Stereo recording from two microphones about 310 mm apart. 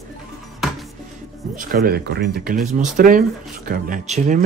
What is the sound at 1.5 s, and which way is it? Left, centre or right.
Speech, right.